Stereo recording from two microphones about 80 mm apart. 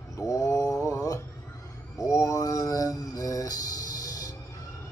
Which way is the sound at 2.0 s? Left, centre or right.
Left.